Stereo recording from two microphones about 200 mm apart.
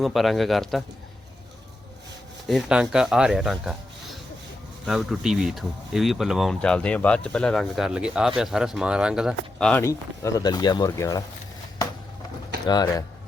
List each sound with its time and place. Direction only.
0.0 s speech: centre (ahead or behind)
2.5 s a man's voice: centre (ahead or behind)
9.8 s speech: 15° left (ahead or behind)
12.6 s speech: 20° left (ahead or behind)